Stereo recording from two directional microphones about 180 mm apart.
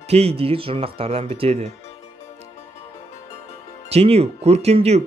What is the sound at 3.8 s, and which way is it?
Speech, 35° right (ahead or behind).